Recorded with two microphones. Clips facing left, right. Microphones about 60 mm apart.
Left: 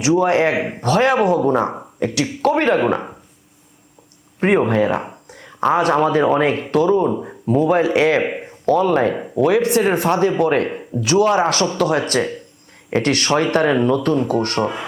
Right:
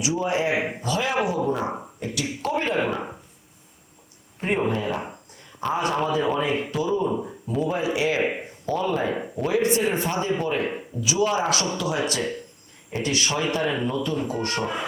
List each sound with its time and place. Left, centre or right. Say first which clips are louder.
0.0 s speech: left 9 dB; left
4.4 s speech: left 9 dB; left
7.1 s speech: left 4 dB; left
7.4 s speech: left 11 dB; left
11.0 s speech: left 8 dB; left
12.9 s speech: left 8 dB; left